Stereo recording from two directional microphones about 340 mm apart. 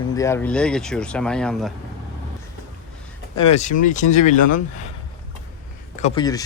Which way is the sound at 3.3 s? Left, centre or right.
Centre.